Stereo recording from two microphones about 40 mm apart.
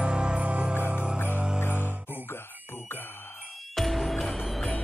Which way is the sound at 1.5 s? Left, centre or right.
Left.